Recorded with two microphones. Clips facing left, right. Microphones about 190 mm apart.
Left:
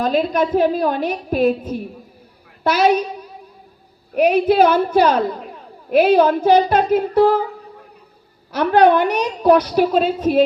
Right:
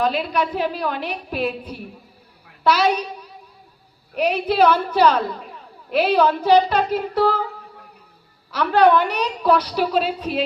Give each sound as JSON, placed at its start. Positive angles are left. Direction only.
{"t": 0.0, "sound": "a woman's voice", "side_deg": 45}
{"t": 8.5, "sound": "a woman's voice", "side_deg": 50}